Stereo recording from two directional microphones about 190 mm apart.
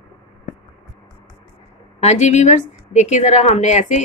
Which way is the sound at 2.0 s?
40° left (ahead or behind).